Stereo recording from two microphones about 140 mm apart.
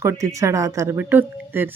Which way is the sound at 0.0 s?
20° right (ahead or behind).